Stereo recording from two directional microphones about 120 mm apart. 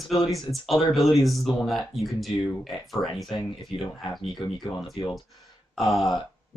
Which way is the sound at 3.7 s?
45° left (ahead or behind).